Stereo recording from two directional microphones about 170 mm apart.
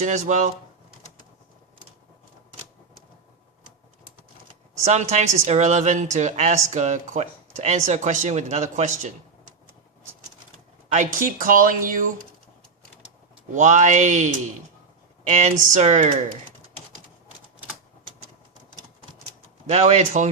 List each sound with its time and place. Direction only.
0.0 s a woman's voice: 45° right (ahead or behind)
4.9 s a woman's voice: 40° right (ahead or behind)
10.9 s a woman's voice: 50° right (ahead or behind)
13.6 s a woman's voice: 45° right (ahead or behind)
15.3 s a woman's voice: 40° right (ahead or behind)
19.7 s speech: 40° right (ahead or behind)